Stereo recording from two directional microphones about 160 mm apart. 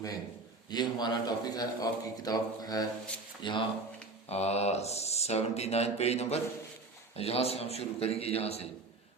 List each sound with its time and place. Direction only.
0.7 s a man's voice: 25° left (ahead or behind)
4.3 s speech: 40° left (ahead or behind)